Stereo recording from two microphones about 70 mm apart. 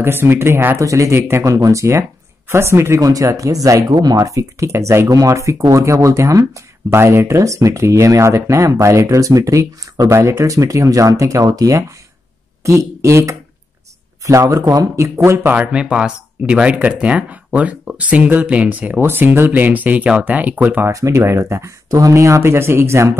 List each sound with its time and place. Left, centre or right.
0.0 s speech: right
0.7 s speech: right
1.4 s speech: right
3.0 s speech: right
3.9 s speech: right
4.2 s speech: right
12.6 s speech: right
15.0 s speech: right
15.5 s speech: centre
20.9 s speech: right